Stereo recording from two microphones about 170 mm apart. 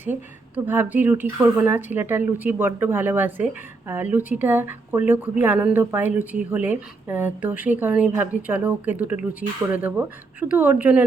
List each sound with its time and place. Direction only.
0.0 s a woman's voice: 10° right (ahead or behind)
9.4 s speech: 50° right (ahead or behind)
9.7 s a woman's voice: 10° right (ahead or behind)